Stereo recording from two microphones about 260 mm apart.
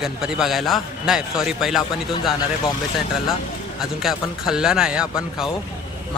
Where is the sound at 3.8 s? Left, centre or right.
Centre.